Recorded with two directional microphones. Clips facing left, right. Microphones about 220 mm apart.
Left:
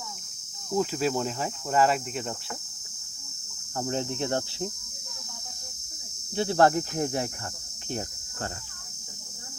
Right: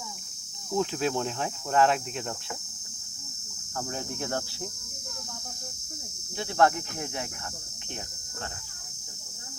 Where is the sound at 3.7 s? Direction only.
25° left (ahead or behind).